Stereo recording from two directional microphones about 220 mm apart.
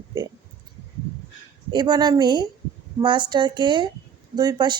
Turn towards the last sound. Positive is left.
turn(degrees=-20)  # may be behind; listen again after turning